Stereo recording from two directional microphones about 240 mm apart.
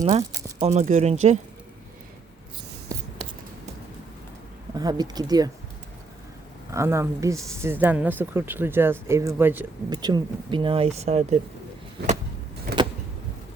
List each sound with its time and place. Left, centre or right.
0.0 s speech: right
4.8 s speech: centre
6.7 s speech: centre; by 11.3 s right
12.7 s vehicle: right